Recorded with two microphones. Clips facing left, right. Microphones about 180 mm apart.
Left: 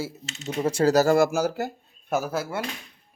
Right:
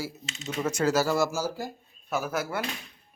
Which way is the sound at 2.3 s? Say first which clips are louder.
Left 2 dB; 25° left (ahead or behind).